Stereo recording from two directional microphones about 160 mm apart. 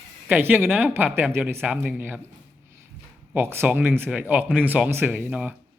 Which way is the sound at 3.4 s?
10° right (ahead or behind).